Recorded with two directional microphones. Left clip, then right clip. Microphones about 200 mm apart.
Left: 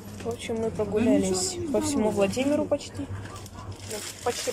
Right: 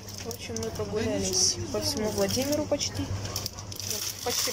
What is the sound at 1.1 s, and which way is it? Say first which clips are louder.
Speech: left 2 dB; 15° left (ahead or behind).